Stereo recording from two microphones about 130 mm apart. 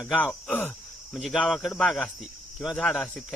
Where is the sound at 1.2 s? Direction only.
5° right (ahead or behind).